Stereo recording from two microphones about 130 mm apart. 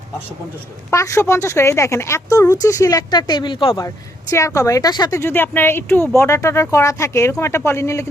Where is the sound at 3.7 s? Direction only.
25° left (ahead or behind).